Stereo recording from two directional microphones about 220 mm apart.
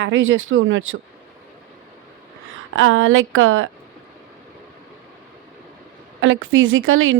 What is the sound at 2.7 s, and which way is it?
Speech, 65° right (ahead or behind).